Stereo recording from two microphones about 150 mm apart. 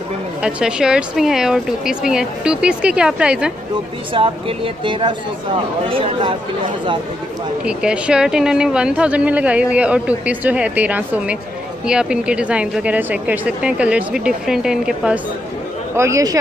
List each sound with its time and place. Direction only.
0.4 s speech: 5° right (ahead or behind)
4.1 s a woman's voice: 35° right (ahead or behind)
7.6 s speech: 5° right (ahead or behind)
16.0 s speech: 20° right (ahead or behind)